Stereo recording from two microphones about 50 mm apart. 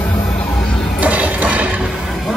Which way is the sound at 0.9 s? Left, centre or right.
Right.